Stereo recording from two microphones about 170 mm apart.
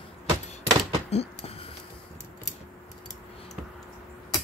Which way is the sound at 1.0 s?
35° left (ahead or behind).